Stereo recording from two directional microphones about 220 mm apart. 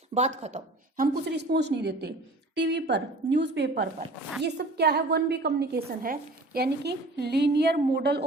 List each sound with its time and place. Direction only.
0.1 s a woman's voice: 30° right (ahead or behind); by 8.2 s 50° right (ahead or behind)